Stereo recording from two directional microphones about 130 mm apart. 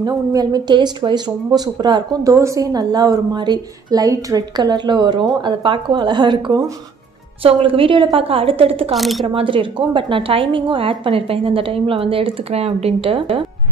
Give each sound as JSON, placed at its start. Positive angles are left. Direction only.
{"t": 0.0, "sound": "a woman's voice", "side_deg": -30}
{"t": 8.9, "sound": "a woman's voice", "side_deg": 0}
{"t": 9.2, "sound": "a woman's voice", "side_deg": -40}